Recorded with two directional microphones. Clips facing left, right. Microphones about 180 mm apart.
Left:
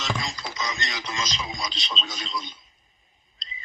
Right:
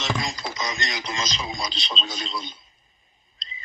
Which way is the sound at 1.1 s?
30° right (ahead or behind).